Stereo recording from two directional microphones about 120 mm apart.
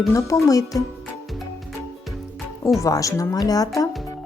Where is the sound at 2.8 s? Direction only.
30° left (ahead or behind).